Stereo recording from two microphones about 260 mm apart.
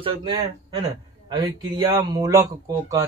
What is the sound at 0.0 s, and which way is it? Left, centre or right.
Speech, centre.